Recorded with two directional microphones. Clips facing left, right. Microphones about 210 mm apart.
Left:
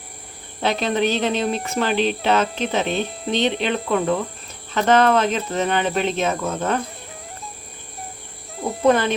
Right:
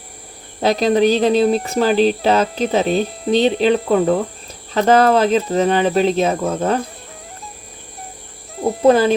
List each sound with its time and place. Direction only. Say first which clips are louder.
0.6 s speech: right 6 dB; 35° right (ahead or behind)
8.9 s speech: right 5 dB; 35° right (ahead or behind)